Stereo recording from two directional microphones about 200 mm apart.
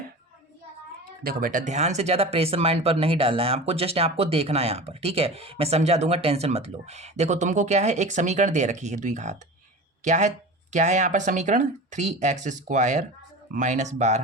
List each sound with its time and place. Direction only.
1.2 s speech: 45° right (ahead or behind)